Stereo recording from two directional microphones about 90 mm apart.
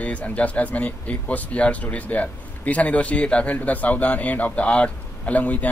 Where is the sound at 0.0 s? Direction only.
15° left (ahead or behind).